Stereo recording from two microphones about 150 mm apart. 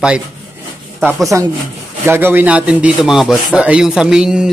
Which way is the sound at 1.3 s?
20° right (ahead or behind).